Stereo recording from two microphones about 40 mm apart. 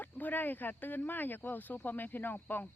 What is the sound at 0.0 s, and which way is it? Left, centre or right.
Speech, left.